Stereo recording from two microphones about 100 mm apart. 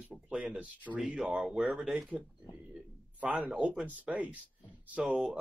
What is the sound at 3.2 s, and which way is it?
Speech, 15° right (ahead or behind).